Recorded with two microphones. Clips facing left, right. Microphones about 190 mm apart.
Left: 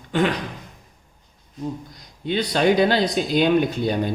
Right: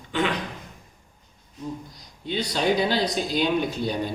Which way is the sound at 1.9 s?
55° left (ahead or behind).